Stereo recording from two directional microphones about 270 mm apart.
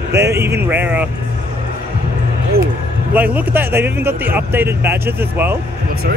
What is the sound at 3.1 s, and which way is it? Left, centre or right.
Speech, centre.